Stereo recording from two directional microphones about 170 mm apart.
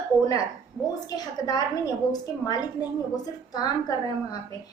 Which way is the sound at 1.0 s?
25° left (ahead or behind).